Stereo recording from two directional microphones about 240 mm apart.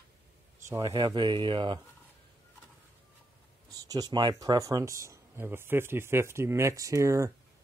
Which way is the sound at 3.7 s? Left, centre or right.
Centre.